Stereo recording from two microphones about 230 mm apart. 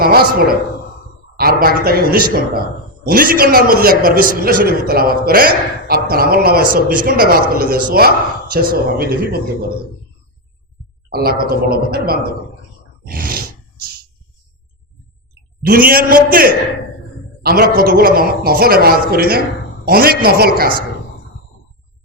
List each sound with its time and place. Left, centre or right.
0.0 s a man's voice: right
11.1 s a man's voice: right
15.9 s a man's voice: right